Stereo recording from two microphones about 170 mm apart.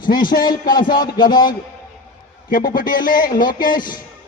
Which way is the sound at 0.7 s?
25° left (ahead or behind).